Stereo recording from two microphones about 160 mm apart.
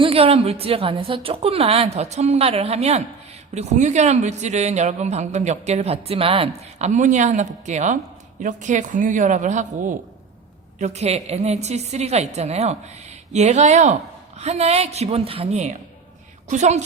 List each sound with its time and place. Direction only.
0.0 s a woman's voice: 35° right (ahead or behind)